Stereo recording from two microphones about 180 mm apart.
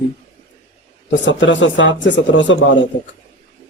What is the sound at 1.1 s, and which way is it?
A man's voice, 90° left.